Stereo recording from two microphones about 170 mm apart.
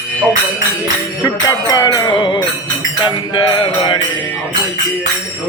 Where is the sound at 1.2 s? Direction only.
20° left (ahead or behind).